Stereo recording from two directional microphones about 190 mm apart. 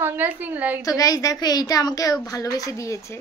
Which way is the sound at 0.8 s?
20° left (ahead or behind).